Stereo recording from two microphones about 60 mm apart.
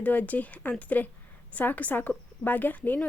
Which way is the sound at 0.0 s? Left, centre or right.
Left.